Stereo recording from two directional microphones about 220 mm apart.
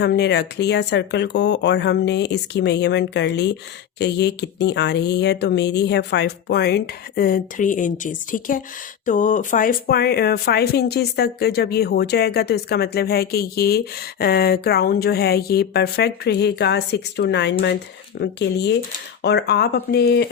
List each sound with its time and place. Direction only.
0.0 s speech: 50° left (ahead or behind)